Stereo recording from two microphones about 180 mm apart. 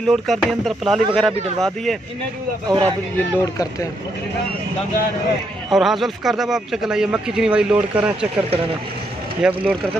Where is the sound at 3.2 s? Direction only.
15° left (ahead or behind).